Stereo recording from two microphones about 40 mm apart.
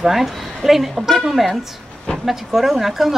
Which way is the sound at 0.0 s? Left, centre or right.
Centre.